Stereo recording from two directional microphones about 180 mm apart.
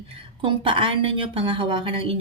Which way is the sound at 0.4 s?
30° right (ahead or behind).